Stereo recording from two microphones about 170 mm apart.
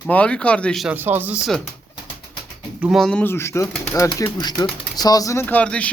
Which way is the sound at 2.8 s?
Centre (ahead or behind).